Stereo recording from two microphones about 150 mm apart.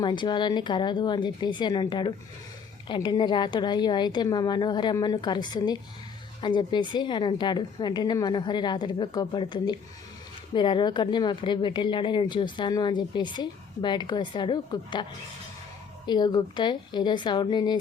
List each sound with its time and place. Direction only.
0.0 s a woman's voice: 30° left (ahead or behind)
16.0 s a woman's voice: 30° left (ahead or behind)